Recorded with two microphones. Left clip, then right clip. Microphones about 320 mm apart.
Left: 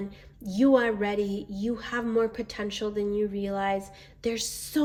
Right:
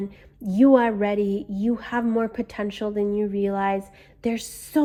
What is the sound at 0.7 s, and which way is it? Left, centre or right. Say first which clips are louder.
Speech: right 4 dB; centre.